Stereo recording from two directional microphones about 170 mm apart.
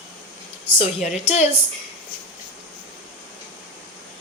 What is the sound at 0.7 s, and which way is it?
Speech, 40° left (ahead or behind).